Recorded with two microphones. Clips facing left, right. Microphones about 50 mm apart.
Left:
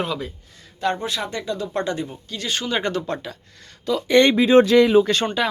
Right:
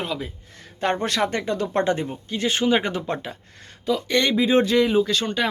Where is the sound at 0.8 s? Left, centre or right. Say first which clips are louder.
Even; right.